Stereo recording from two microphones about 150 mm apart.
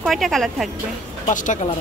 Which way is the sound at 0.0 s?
Centre (ahead or behind).